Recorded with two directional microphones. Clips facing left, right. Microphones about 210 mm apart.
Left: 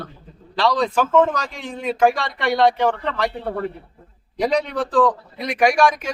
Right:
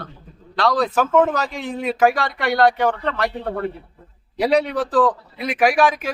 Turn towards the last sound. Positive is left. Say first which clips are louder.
# even
turn(degrees=-5)  # may be behind; listen again after turning